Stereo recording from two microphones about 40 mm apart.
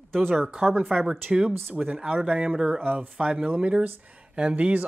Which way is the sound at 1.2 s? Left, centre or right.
Right.